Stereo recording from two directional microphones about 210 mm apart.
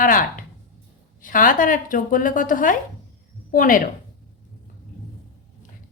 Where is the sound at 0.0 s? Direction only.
40° left (ahead or behind).